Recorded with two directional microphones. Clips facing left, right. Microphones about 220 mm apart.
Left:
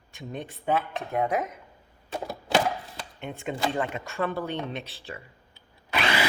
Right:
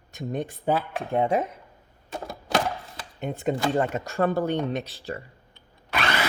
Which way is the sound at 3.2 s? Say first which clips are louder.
Right 5 dB; 40° right (ahead or behind).